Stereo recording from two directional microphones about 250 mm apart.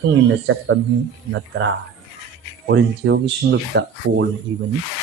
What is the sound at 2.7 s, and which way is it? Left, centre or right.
Speech, right.